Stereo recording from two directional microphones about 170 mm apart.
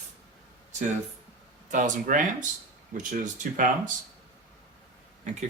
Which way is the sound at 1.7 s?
50° right (ahead or behind).